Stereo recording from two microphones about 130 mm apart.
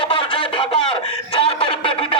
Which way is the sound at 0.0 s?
40° left (ahead or behind).